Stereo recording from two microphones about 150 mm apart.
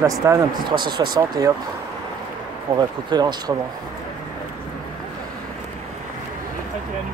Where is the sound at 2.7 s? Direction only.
25° right (ahead or behind).